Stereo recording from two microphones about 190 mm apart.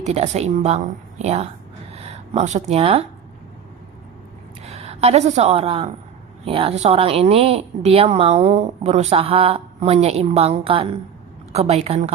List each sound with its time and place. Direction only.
0.0 s speech: 35° right (ahead or behind)
4.6 s a woman's voice: 35° right (ahead or behind)